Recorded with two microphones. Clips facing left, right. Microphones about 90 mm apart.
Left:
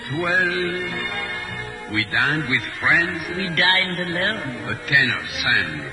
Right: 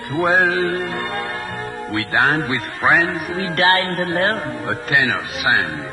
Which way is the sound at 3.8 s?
50° right (ahead or behind).